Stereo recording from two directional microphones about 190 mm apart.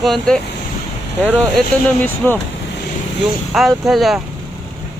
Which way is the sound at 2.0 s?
10° left (ahead or behind).